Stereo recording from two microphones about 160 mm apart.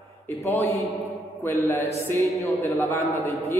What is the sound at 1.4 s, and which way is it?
A man's voice, 15° left (ahead or behind).